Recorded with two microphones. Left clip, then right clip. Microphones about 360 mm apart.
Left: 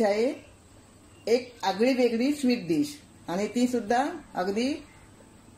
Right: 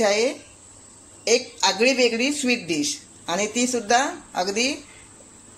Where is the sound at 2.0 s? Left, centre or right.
Right.